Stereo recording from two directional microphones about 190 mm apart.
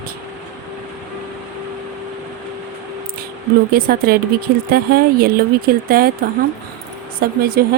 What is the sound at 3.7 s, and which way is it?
Speech, 50° right (ahead or behind).